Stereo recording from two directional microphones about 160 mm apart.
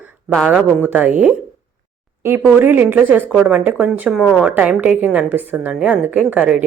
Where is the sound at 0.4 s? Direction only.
10° right (ahead or behind).